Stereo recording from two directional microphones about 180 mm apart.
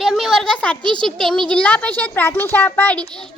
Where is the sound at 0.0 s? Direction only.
Centre (ahead or behind).